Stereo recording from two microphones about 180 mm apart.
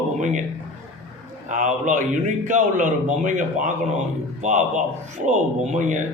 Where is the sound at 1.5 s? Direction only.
45° right (ahead or behind).